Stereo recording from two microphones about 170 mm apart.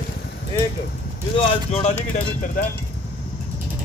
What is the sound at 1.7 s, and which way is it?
Speech, 45° left (ahead or behind).